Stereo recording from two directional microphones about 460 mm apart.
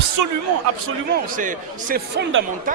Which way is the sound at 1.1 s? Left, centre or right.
Centre.